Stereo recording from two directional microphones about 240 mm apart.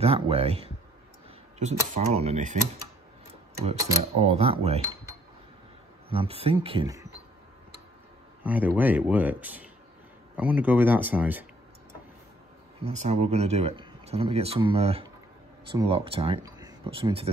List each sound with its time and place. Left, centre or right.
0.0 s speech: right
4.2 s speech: right
6.0 s speech: right
8.5 s speech: centre
12.8 s speech: right